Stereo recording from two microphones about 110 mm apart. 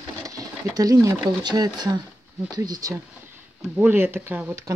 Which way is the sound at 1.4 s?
40° right (ahead or behind).